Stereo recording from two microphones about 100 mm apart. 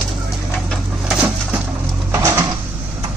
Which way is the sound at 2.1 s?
25° right (ahead or behind).